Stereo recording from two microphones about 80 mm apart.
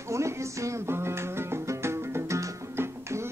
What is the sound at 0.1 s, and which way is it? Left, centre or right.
Music, right.